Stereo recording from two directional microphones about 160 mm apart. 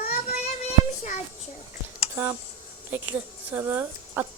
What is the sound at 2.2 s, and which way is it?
Speech, 15° right (ahead or behind).